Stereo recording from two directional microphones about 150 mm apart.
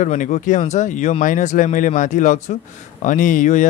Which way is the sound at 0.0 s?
55° left (ahead or behind).